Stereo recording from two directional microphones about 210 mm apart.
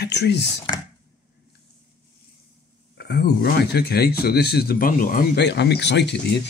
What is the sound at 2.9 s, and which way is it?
Speech, 50° left (ahead or behind).